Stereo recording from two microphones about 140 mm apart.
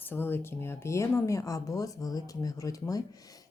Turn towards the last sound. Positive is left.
turn(degrees=25)  # may be behind; listen again after turning